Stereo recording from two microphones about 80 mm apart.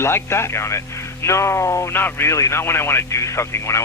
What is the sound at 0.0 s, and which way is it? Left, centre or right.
Speech, left.